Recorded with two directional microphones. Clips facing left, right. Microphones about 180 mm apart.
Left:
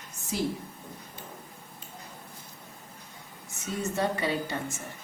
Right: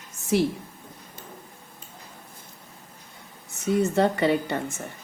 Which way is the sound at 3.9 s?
65° right (ahead or behind).